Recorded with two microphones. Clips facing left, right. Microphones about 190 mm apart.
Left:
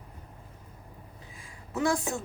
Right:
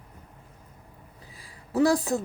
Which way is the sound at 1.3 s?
35° right (ahead or behind).